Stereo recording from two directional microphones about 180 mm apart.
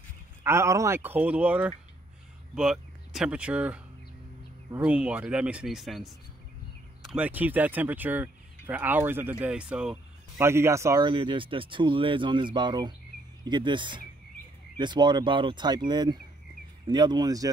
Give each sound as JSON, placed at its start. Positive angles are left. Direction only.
{"t": 0.4, "sound": "speech", "side_deg": -15}
{"t": 10.4, "sound": "speech", "side_deg": -15}
{"t": 11.1, "sound": "speech", "side_deg": -25}